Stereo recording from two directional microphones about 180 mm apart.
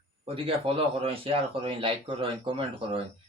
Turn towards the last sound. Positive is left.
turn(degrees=-30)  # may be behind; listen again after turning